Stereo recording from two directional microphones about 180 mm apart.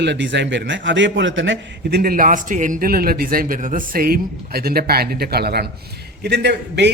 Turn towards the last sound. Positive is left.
turn(degrees=-70)  # may be behind; listen again after turning